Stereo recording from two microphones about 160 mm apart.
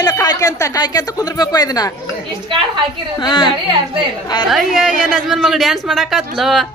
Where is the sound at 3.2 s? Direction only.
30° left (ahead or behind).